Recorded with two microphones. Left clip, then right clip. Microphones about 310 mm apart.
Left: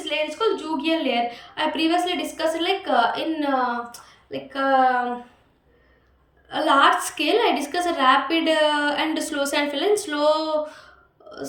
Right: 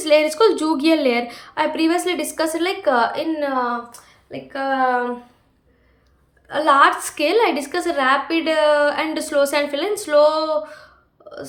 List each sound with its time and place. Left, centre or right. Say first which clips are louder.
0.0 s a woman's voice: right 9 dB; centre
6.5 s a woman's voice: right 3 dB; centre